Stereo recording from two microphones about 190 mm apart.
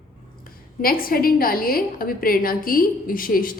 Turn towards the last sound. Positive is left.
turn(degrees=50)  # may be behind; listen again after turning